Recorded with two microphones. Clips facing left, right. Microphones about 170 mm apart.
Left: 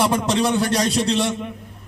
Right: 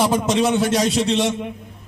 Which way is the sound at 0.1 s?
Centre (ahead or behind).